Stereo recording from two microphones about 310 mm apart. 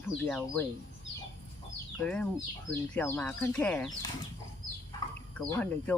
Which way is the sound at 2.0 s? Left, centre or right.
Centre.